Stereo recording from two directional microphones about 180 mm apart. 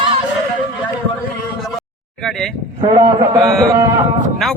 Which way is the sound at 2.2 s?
Centre (ahead or behind).